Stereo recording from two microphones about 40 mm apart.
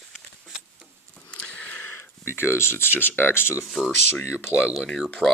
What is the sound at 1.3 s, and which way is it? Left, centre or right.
Sniff, left.